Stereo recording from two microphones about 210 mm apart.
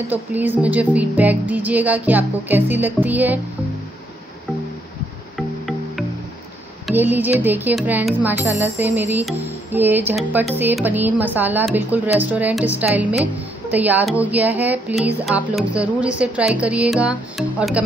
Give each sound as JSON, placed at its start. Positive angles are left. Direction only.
{"t": 0.1, "sound": "a woman's voice", "side_deg": -10}
{"t": 6.9, "sound": "a woman's voice", "side_deg": -10}